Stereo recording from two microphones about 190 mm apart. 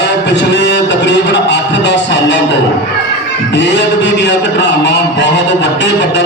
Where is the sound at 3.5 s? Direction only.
65° left (ahead or behind).